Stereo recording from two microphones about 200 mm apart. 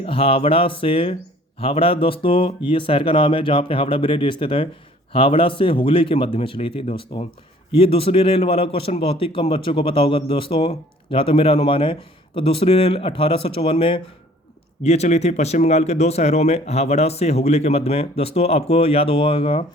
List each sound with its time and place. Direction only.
0.0 s a man's voice: 30° left (ahead or behind)